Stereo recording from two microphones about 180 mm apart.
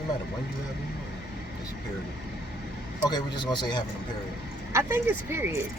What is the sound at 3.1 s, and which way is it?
Speech, 25° left (ahead or behind).